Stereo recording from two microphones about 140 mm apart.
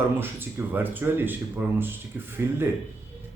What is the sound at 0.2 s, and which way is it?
Speech, 15° right (ahead or behind).